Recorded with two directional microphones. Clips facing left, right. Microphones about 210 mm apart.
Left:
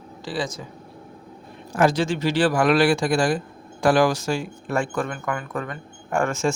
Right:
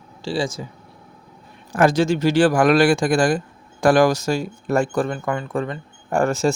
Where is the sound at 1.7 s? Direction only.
50° right (ahead or behind).